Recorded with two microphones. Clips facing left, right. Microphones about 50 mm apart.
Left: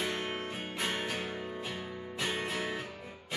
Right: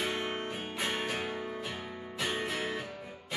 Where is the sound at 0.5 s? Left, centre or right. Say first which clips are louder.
Right 1 dB; centre.